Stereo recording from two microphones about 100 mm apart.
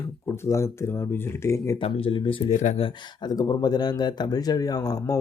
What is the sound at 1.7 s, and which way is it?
Speech, 70° left (ahead or behind).